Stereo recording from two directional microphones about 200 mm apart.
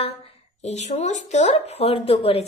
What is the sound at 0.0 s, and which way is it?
Speech, 30° left (ahead or behind).